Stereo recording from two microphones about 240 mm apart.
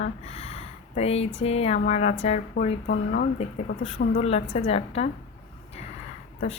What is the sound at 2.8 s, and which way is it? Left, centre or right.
Speech, left.